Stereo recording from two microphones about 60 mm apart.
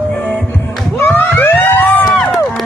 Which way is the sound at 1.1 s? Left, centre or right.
Left.